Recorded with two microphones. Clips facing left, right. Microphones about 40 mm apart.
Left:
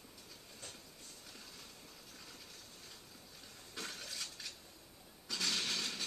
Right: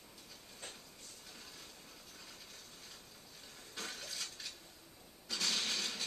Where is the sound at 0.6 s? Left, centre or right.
Right.